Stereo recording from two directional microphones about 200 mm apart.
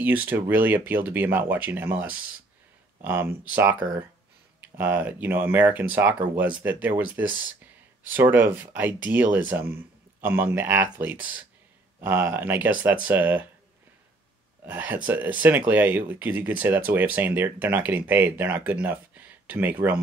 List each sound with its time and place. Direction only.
0.0 s speech: 10° right (ahead or behind)
7.2 s speech: 75° right (ahead or behind)
8.1 s speech: 10° right (ahead or behind)
14.7 s speech: 10° right (ahead or behind)